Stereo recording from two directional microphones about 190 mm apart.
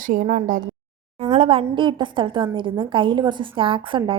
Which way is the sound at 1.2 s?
35° right (ahead or behind).